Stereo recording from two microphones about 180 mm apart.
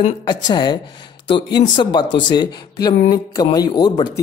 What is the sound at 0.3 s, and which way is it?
Speech, 25° left (ahead or behind).